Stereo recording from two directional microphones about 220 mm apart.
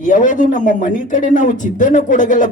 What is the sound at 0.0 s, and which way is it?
Speech, 35° left (ahead or behind).